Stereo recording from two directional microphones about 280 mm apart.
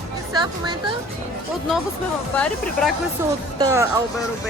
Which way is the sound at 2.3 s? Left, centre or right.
Centre.